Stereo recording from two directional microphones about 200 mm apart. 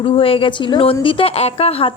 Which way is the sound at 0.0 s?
25° left (ahead or behind).